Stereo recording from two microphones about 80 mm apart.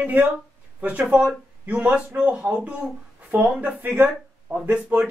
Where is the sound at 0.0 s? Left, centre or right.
Right.